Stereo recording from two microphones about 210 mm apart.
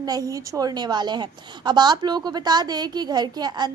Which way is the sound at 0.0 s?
15° right (ahead or behind).